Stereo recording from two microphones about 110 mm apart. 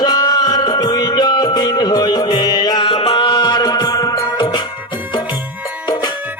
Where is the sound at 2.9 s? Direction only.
50° left (ahead or behind).